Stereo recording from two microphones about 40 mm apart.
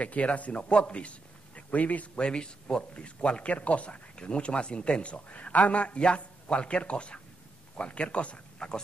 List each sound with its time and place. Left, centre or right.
0.0 s a man's voice: left
2.2 s speech: left